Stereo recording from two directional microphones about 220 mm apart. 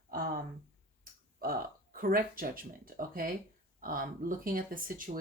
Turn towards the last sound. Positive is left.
turn(degrees=-40)  # may be behind; listen again after turning